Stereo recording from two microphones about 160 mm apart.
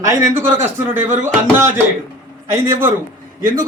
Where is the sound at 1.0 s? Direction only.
50° right (ahead or behind).